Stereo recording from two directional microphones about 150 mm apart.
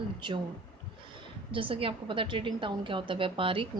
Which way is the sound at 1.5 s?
35° right (ahead or behind).